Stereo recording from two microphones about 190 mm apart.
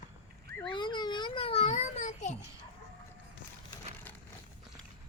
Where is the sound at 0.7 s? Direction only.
25° left (ahead or behind).